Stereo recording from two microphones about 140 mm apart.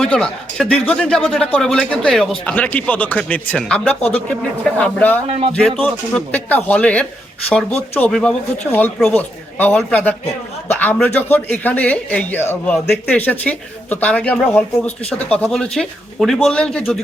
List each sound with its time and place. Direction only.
0.0 s a man's voice: 5° left (ahead or behind)